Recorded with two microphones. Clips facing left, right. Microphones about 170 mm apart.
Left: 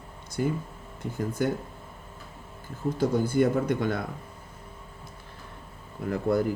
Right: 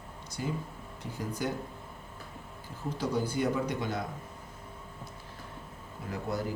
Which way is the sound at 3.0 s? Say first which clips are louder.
Left 7 dB; 50° left (ahead or behind).